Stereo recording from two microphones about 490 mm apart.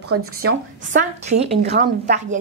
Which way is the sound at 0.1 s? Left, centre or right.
Right.